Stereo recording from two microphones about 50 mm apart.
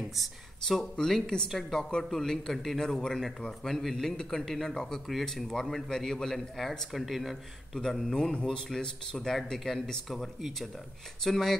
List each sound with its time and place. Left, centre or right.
0.0 s speech: centre
7.8 s speech: centre